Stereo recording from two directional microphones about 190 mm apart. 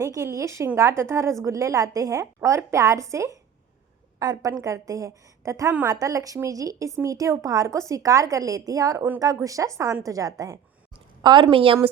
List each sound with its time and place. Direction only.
0.0 s a woman's voice: 15° right (ahead or behind)